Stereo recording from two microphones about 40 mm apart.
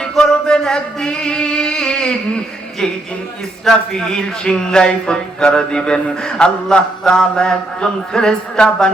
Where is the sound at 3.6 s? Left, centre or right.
Centre.